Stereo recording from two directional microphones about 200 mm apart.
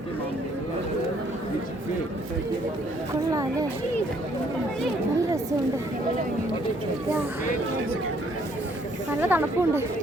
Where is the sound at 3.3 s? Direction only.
20° right (ahead or behind).